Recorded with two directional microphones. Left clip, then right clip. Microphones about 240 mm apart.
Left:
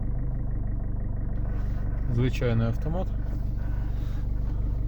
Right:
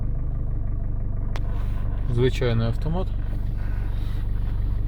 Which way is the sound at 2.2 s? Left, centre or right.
Right.